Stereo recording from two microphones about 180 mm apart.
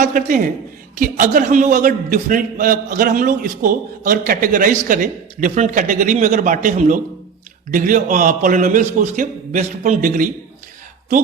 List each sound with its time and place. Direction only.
0.0 s a man's voice: 45° right (ahead or behind)